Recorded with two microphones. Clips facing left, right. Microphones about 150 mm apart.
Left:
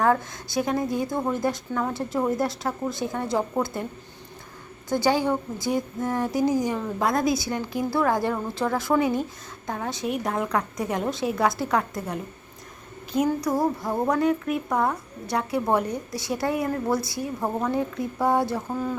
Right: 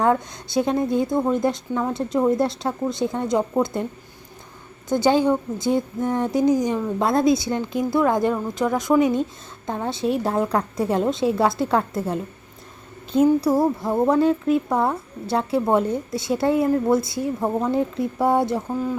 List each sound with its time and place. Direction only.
0.0 s a woman's voice: 25° right (ahead or behind)
4.9 s a woman's voice: 20° right (ahead or behind)